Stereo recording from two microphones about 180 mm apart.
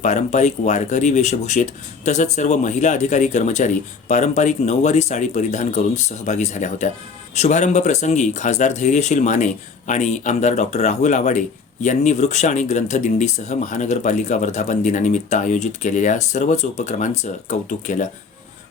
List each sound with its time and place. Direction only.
0.0 s speech: 40° left (ahead or behind)